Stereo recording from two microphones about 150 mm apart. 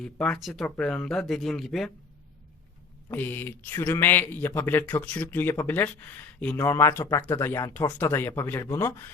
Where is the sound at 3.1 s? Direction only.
10° left (ahead or behind).